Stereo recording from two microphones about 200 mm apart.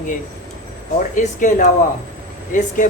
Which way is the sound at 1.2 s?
40° left (ahead or behind).